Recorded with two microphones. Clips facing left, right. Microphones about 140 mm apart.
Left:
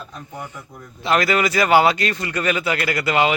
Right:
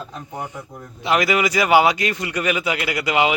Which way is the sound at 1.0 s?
15° right (ahead or behind).